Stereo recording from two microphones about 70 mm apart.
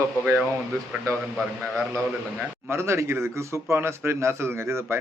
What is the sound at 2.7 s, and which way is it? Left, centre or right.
A man's voice, right.